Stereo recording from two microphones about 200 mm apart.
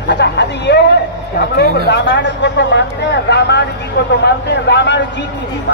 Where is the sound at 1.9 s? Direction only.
60° left (ahead or behind).